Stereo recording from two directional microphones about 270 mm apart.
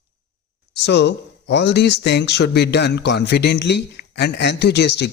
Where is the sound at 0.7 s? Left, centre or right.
Left.